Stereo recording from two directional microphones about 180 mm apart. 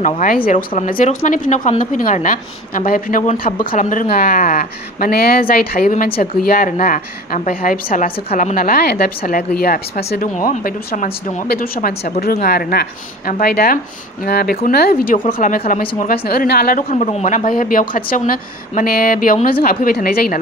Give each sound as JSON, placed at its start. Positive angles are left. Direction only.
{"t": 0.0, "sound": "a woman's voice", "side_deg": 45}
{"t": 8.3, "sound": "a woman's voice", "side_deg": 40}
{"t": 8.5, "sound": "a woman's voice", "side_deg": 55}
{"t": 10.2, "sound": "a woman's voice", "side_deg": 45}
{"t": 15.1, "sound": "speech", "side_deg": 30}
{"t": 16.0, "sound": "a woman's voice", "side_deg": 55}
{"t": 16.9, "sound": "a woman's voice", "side_deg": 40}